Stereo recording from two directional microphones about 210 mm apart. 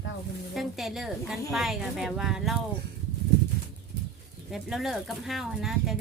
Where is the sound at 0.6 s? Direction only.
Centre (ahead or behind).